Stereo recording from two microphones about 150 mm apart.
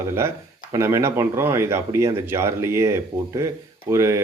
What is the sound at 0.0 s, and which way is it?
Speech, 20° right (ahead or behind).